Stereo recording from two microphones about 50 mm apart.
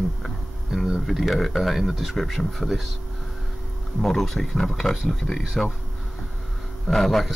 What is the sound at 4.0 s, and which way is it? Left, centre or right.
Speech, centre.